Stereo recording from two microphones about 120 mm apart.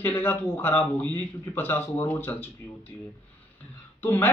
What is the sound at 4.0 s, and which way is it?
Speech, 15° left (ahead or behind).